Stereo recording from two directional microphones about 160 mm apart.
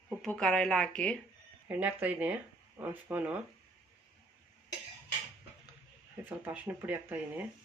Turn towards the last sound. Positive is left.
turn(degrees=-10)  # may be behind; listen again after turning